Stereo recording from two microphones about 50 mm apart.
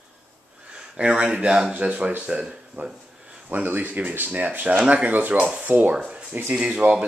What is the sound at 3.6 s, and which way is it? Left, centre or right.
Speech, right.